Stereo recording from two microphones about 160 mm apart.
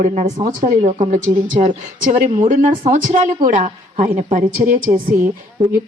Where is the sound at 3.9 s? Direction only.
50° right (ahead or behind).